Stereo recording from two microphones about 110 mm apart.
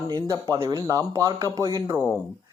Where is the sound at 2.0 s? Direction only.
5° left (ahead or behind).